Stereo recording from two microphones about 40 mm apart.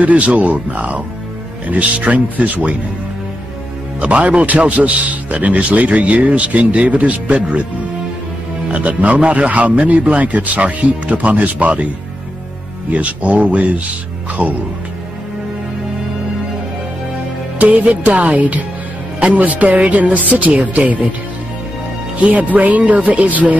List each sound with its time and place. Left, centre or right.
0.0 s a man's voice: right
4.0 s a man's voice: right
8.6 s a man's voice: right
12.9 s a man's voice: right
17.6 s a man's voice: right
20.2 s speech: right
20.4 s a man's voice: right
22.2 s a man's voice: right